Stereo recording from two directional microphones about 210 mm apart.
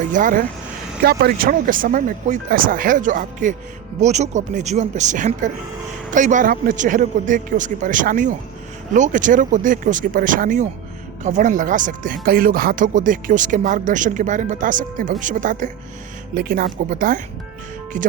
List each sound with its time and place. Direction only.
0.0 s speech: 40° right (ahead or behind)